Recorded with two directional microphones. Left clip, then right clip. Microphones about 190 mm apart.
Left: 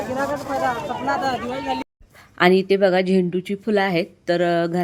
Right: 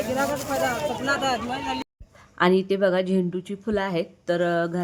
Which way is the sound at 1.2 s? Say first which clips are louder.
Left 2 dB; 55° right (ahead or behind).